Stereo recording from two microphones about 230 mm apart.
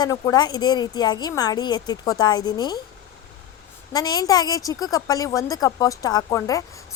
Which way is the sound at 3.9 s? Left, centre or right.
Centre.